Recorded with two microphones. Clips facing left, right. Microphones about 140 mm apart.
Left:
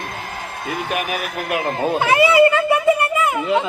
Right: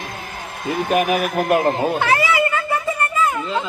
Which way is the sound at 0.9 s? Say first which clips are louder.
Right 9 dB; 45° right (ahead or behind).